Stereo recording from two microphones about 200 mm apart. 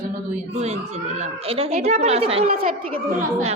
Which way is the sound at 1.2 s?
30° right (ahead or behind).